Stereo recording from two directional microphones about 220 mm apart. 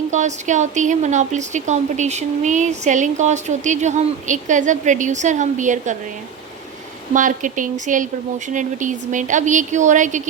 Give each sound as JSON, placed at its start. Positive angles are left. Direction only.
{"t": 0.1, "sound": "speech", "side_deg": -35}
{"t": 7.1, "sound": "speech", "side_deg": -35}